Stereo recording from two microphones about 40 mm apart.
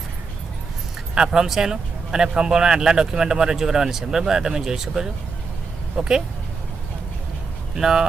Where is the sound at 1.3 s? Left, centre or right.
Centre.